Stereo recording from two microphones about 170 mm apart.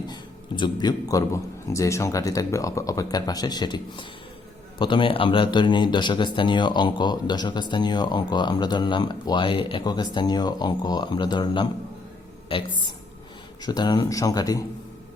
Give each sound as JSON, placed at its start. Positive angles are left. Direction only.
{"t": 0.1, "sound": "speech", "side_deg": 25}